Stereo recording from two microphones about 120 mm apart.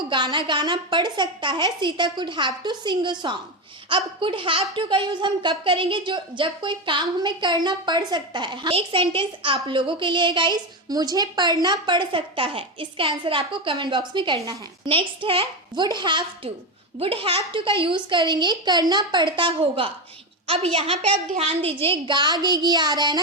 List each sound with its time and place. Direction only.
0.1 s speech: 40° right (ahead or behind)
17.0 s speech: 50° right (ahead or behind)
20.5 s speech: 55° right (ahead or behind); by 23.2 s 35° right (ahead or behind)